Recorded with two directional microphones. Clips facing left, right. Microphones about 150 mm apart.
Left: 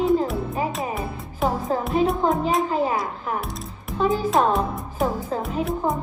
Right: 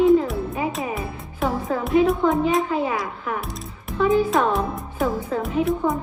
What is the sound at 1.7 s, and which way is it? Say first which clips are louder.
Speech: right 5 dB; 35° left (ahead or behind).